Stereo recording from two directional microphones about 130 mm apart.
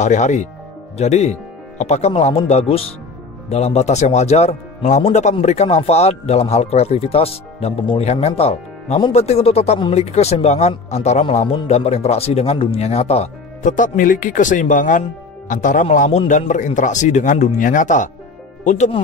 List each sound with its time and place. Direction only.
0.0 s speech: 65° left (ahead or behind)
13.6 s a man's voice: 80° left